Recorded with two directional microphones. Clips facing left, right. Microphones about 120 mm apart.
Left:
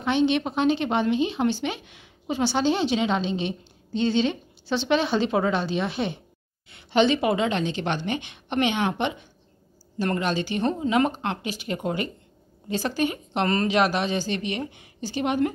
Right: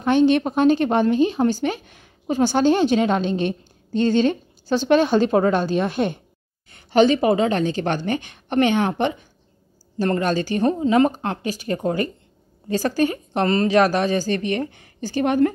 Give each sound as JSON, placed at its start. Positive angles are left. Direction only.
{"t": 0.0, "sound": "a woman's voice", "side_deg": -45}